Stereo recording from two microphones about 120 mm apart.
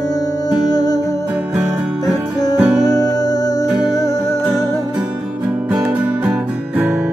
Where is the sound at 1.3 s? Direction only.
10° right (ahead or behind).